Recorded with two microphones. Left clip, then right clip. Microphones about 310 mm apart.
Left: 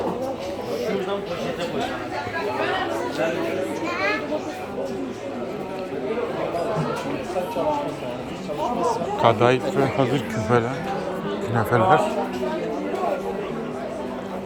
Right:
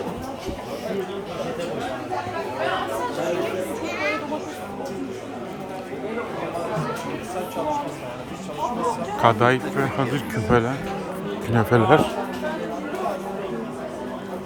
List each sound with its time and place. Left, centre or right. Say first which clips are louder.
8.6 s chatter: left 1 dB; right
9.2 s a man's voice: even; centre